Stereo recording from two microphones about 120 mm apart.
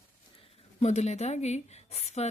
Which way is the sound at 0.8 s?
70° left (ahead or behind).